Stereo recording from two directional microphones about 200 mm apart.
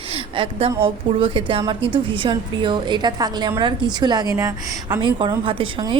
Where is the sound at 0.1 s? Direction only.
25° right (ahead or behind).